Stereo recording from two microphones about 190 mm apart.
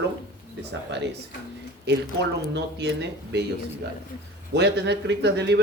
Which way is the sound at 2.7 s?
65° right (ahead or behind).